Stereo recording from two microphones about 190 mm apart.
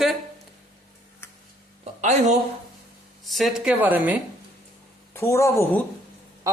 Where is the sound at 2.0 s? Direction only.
35° right (ahead or behind).